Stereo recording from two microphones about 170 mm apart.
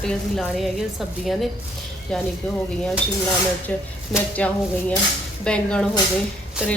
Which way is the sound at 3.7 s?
10° left (ahead or behind).